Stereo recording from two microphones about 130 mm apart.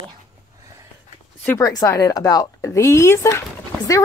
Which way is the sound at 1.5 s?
25° left (ahead or behind).